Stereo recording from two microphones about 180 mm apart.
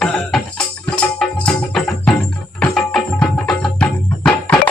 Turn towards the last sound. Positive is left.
turn(degrees=5)  # may be behind; listen again after turning